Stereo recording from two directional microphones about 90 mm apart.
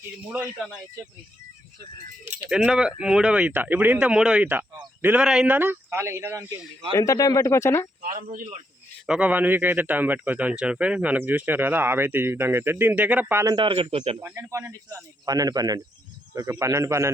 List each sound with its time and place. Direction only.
2.5 s speech: 10° right (ahead or behind)
4.0 s speech: 10° right (ahead or behind)
5.5 s a man's voice: 20° right (ahead or behind)
6.9 s speech: 40° left (ahead or behind)
9.0 s a man's voice: 10° right (ahead or behind)
13.6 s speech: 80° right
14.2 s a man's voice: 30° right (ahead or behind)
14.7 s speech: 40° right (ahead or behind)
16.3 s a man's voice: 35° right (ahead or behind)